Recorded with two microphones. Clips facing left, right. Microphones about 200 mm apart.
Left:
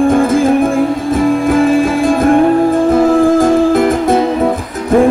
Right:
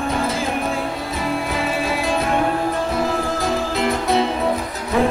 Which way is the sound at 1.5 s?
50° left (ahead or behind).